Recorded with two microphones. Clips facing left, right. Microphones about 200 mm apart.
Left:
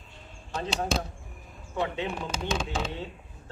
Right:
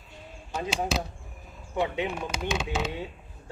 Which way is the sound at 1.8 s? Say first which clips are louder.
Right 2 dB; 15° right (ahead or behind).